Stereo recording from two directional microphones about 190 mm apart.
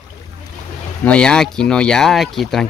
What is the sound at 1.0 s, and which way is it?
Speech, 5° left (ahead or behind).